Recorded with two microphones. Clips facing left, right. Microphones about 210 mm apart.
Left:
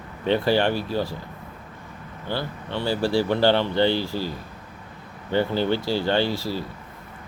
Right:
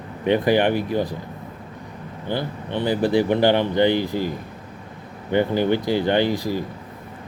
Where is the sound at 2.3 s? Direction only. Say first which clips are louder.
Right 3 dB; 20° right (ahead or behind).